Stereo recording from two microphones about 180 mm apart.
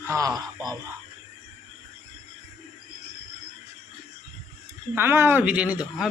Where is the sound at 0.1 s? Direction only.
20° right (ahead or behind).